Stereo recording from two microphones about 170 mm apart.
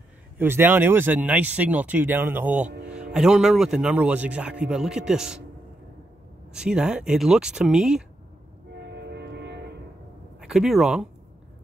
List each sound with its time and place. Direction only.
0.4 s a man's voice: 10° right (ahead or behind)
6.5 s a man's voice: 5° right (ahead or behind)
8.7 s train: 80° right
10.4 s a man's voice: 5° right (ahead or behind)